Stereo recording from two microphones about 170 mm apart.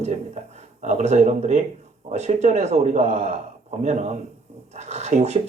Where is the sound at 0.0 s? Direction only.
40° right (ahead or behind).